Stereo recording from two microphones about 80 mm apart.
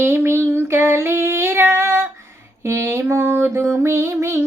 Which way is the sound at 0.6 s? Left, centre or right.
Right.